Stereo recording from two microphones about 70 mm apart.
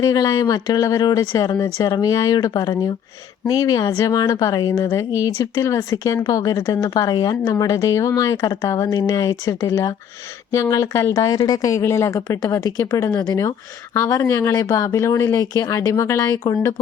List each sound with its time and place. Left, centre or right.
0.0 s a woman's voice: left
1.5 s speech: left
1.9 s a woman's voice: left
6.2 s a woman's voice: left
9.0 s a woman's voice: left
11.1 s a woman's voice: left
11.7 s speech: left
13.1 s speech: left
14.1 s speech: left
16.3 s a woman's voice: left